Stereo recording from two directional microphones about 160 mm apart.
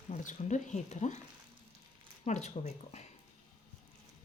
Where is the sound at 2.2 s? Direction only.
45° left (ahead or behind).